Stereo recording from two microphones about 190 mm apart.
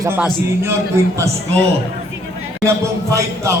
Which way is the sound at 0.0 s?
10° right (ahead or behind).